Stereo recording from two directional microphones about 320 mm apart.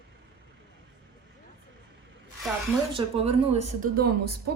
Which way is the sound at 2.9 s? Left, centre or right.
Centre.